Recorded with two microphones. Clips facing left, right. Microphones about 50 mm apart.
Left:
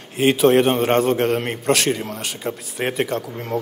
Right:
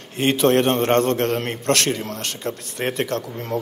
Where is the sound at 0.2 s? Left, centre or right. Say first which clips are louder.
Left 2 dB; centre.